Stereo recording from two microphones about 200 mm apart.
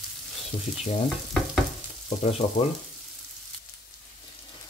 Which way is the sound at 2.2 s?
30° left (ahead or behind).